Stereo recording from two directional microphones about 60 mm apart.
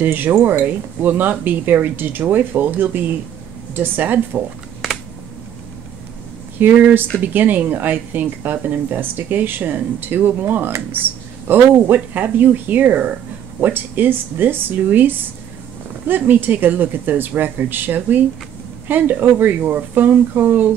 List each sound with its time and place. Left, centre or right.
0.0 s speech: right
6.6 s speech: right